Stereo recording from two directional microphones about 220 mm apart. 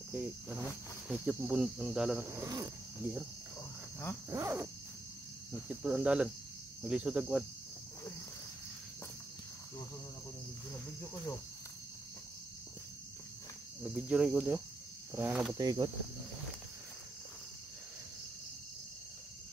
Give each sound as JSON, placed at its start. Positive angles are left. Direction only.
{"t": 0.1, "sound": "speech", "side_deg": -5}
{"t": 4.3, "sound": "cricket", "side_deg": -10}
{"t": 5.8, "sound": "speech", "side_deg": -5}
{"t": 13.8, "sound": "speech", "side_deg": -5}
{"t": 15.1, "sound": "cricket", "side_deg": -10}